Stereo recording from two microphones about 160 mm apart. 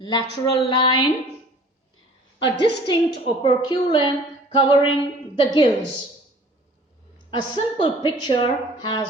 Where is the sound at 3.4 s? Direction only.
35° left (ahead or behind).